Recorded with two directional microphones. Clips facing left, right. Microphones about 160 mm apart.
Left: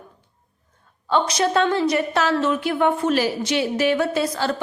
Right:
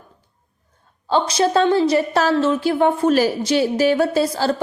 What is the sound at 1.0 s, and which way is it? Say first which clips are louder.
A woman's voice: right 2 dB; 30° right (ahead or behind).